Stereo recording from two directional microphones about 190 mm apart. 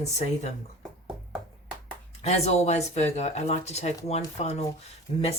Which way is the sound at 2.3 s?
35° left (ahead or behind).